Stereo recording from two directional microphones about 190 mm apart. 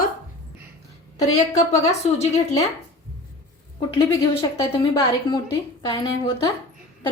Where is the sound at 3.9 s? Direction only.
25° left (ahead or behind).